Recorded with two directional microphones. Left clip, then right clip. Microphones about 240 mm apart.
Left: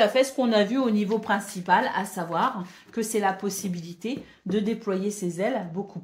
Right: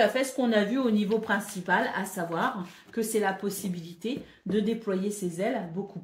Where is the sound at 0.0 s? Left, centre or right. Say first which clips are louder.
Left 4 dB; left.